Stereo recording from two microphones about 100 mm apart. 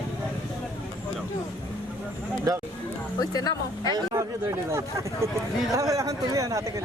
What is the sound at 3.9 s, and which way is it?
Speech, 40° right (ahead or behind).